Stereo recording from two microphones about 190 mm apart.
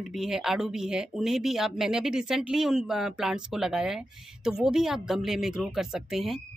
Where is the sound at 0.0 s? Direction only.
Centre (ahead or behind).